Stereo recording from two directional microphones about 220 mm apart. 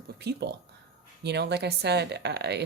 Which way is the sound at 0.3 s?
50° right (ahead or behind).